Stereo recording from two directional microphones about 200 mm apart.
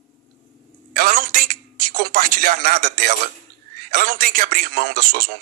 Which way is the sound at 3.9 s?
45° right (ahead or behind).